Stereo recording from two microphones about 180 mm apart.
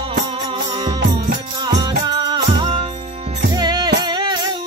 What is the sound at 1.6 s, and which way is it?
Music, 25° right (ahead or behind).